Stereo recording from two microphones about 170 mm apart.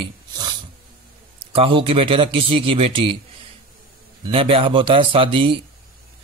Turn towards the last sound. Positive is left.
turn(degrees=-30)  # may be behind; listen again after turning